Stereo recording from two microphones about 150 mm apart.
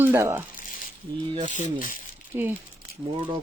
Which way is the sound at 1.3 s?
55° right (ahead or behind).